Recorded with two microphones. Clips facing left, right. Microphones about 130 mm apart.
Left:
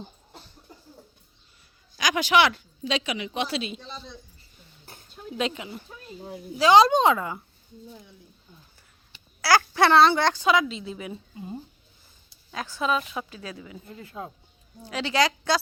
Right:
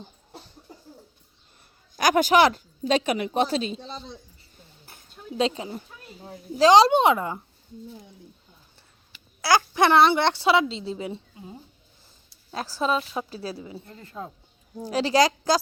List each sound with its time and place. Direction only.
2.0 s speech: 50° right (ahead or behind); by 4.2 s 30° right (ahead or behind)
5.4 s a woman's voice: 30° right (ahead or behind)
9.4 s speech: 20° right (ahead or behind)
12.5 s a woman's voice: 35° right (ahead or behind)
13.8 s speech: 10° left (ahead or behind)
14.8 s a woman's voice: 40° right (ahead or behind)